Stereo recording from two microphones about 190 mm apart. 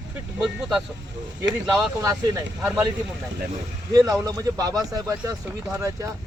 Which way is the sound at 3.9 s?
20° right (ahead or behind).